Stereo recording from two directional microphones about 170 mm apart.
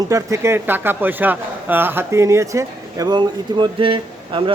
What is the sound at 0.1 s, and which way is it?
A man's voice, 20° right (ahead or behind).